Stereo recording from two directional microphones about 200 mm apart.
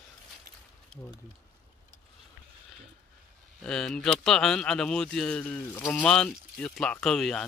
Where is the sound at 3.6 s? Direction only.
5° left (ahead or behind).